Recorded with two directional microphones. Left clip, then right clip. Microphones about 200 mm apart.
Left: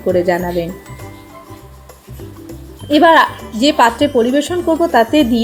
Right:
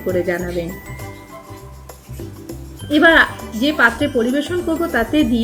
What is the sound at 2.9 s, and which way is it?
Speech, 20° left (ahead or behind).